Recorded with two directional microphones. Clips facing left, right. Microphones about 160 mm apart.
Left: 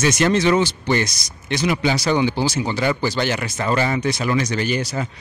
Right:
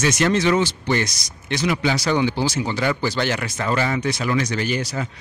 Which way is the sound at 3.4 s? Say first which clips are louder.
Left 2 dB; 25° left (ahead or behind).